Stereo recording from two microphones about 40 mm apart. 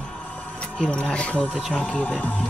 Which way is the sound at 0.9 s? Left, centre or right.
Left.